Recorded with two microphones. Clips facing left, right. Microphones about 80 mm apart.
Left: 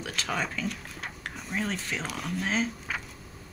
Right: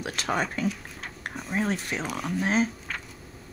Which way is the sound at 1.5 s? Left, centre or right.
Right.